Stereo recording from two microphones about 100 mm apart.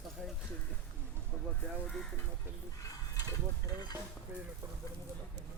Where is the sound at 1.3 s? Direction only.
5° left (ahead or behind).